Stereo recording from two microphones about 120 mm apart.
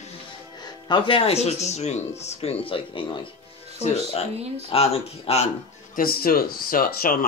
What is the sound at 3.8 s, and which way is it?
Speech, 60° left (ahead or behind).